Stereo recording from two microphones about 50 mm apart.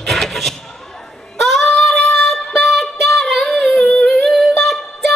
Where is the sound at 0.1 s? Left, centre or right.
Centre.